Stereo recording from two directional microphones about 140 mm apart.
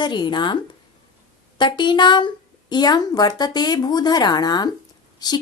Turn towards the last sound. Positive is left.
turn(degrees=30)  # may be behind; listen again after turning